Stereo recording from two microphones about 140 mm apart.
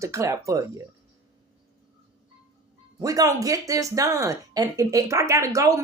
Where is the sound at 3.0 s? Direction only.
25° right (ahead or behind).